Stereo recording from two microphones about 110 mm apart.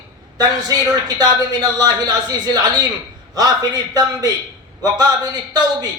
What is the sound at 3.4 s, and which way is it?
A man's voice, 35° right (ahead or behind).